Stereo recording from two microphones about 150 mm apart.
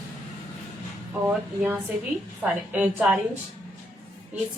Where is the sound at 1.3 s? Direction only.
10° right (ahead or behind).